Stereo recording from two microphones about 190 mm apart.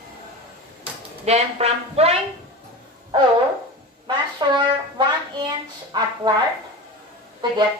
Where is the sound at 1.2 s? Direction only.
35° right (ahead or behind).